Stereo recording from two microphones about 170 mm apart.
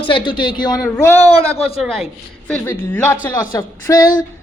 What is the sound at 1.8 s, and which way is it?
Speech, centre (ahead or behind).